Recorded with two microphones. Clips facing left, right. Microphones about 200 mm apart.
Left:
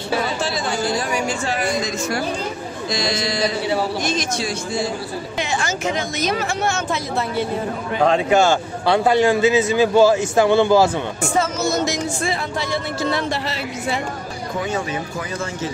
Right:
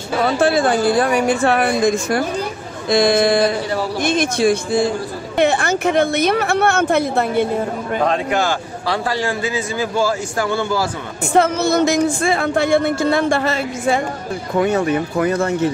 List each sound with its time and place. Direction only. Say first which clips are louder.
0.4 s speech: right 8 dB; 55° right (ahead or behind)
8.1 s a man's voice: left 3 dB; 25° left (ahead or behind)
11.3 s speech: right 6 dB; 60° right (ahead or behind)